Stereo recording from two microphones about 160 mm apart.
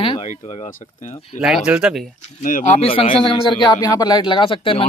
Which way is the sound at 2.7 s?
35° left (ahead or behind).